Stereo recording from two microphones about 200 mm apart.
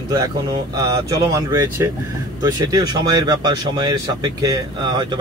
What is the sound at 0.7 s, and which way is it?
Speech, 20° right (ahead or behind).